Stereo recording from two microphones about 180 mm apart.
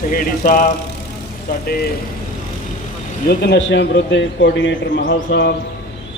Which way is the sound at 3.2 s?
60° left (ahead or behind).